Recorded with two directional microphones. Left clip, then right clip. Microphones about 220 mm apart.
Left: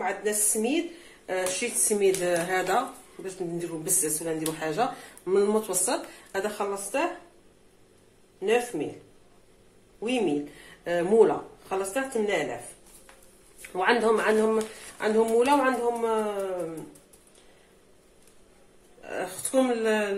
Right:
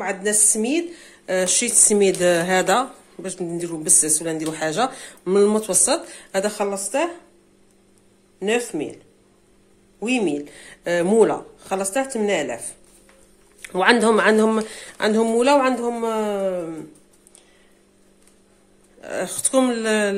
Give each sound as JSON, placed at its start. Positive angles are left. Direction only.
{"t": 0.0, "sound": "a woman's voice", "side_deg": -45}
{"t": 8.4, "sound": "a woman's voice", "side_deg": -50}
{"t": 9.9, "sound": "a woman's voice", "side_deg": -50}
{"t": 13.6, "sound": "a woman's voice", "side_deg": -50}
{"t": 18.9, "sound": "a woman's voice", "side_deg": -45}